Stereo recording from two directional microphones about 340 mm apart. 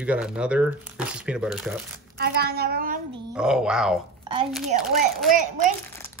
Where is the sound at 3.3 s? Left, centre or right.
Centre.